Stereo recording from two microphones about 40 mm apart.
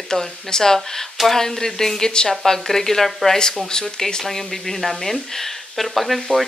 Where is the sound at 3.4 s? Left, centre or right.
Centre.